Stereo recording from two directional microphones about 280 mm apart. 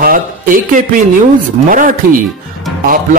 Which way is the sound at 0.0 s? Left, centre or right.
Right.